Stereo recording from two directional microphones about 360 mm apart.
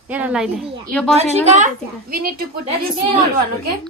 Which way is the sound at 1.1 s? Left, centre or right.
Centre.